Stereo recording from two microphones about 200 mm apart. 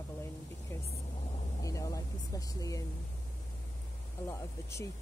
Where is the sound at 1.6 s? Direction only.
15° left (ahead or behind).